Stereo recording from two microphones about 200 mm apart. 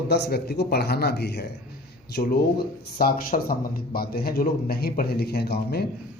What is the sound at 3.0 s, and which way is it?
Speech, 45° left (ahead or behind).